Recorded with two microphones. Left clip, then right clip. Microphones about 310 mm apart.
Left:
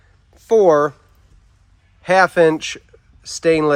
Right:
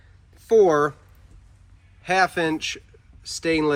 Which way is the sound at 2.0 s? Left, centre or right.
Left.